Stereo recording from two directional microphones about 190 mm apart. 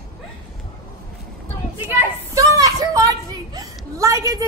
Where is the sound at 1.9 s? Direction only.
15° right (ahead or behind).